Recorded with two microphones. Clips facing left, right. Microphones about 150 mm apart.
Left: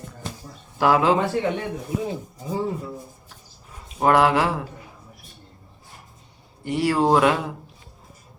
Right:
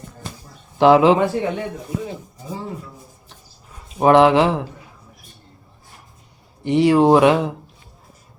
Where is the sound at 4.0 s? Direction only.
20° right (ahead or behind).